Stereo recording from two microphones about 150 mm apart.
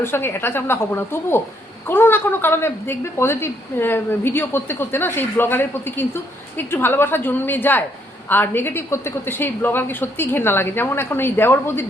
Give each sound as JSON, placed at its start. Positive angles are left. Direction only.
{"t": 0.0, "sound": "a woman's voice", "side_deg": 15}